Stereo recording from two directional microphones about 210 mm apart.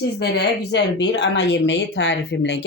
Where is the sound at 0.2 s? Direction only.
55° left (ahead or behind).